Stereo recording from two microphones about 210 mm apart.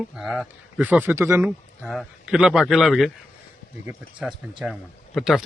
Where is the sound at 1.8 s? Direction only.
Centre (ahead or behind).